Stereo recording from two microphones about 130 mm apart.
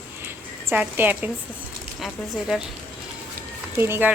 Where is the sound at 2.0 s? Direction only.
Centre (ahead or behind).